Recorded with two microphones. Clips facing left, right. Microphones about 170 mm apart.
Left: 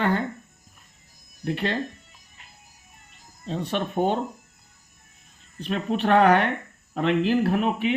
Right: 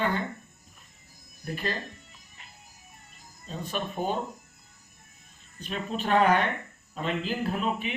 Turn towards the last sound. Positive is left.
turn(degrees=70)  # may be behind; listen again after turning